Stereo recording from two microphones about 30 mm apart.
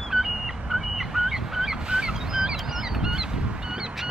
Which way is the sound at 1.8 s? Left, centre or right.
Right.